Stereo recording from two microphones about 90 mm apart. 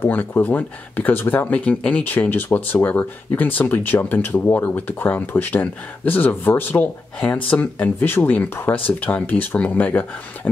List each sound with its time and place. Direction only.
0.0 s speech: 20° left (ahead or behind)